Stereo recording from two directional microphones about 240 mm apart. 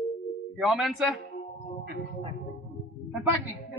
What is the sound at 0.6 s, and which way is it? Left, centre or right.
Speech, centre.